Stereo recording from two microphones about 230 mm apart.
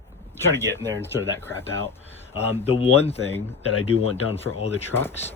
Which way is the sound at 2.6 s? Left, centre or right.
Left.